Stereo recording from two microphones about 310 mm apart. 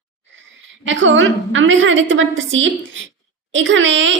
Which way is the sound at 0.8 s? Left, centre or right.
Right.